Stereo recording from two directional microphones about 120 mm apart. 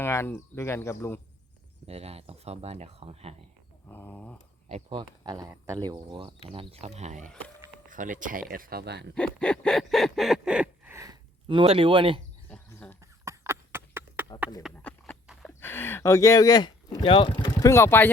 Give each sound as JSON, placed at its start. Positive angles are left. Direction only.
{"t": 0.0, "sound": "speech", "side_deg": 20}
{"t": 1.9, "sound": "speech", "side_deg": -60}
{"t": 3.8, "sound": "dog", "side_deg": 15}
{"t": 4.9, "sound": "speech", "side_deg": -40}
{"t": 5.5, "sound": "speech", "side_deg": -25}
{"t": 9.1, "sound": "a sound", "side_deg": 10}
{"t": 10.9, "sound": "gasp", "side_deg": -30}
{"t": 11.4, "sound": "speech", "side_deg": -50}
{"t": 12.5, "sound": "a sound", "side_deg": 10}
{"t": 13.0, "sound": "a sound", "side_deg": -25}
{"t": 14.8, "sound": "a sound", "side_deg": 10}
{"t": 15.6, "sound": "speech", "side_deg": 20}
{"t": 17.7, "sound": "speech", "side_deg": 20}